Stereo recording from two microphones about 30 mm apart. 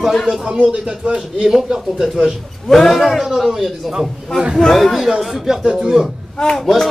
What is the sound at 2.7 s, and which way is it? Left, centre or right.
Speech, centre.